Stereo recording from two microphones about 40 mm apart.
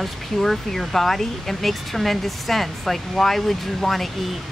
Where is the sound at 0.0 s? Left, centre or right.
Centre.